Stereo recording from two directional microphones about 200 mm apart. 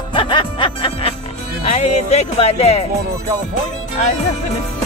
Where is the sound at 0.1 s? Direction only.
25° left (ahead or behind).